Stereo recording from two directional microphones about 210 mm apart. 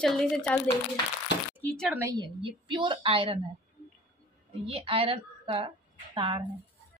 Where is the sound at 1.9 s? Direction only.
15° right (ahead or behind).